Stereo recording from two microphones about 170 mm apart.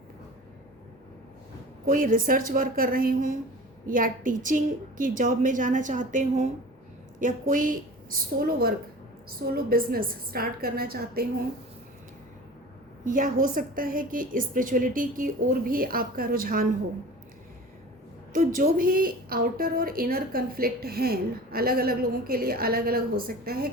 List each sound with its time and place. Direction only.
1.9 s a woman's voice: 55° right (ahead or behind)
13.1 s a woman's voice: 55° right (ahead or behind)
18.3 s a woman's voice: 55° right (ahead or behind)